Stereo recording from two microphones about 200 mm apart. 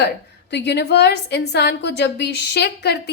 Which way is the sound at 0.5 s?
60° left (ahead or behind).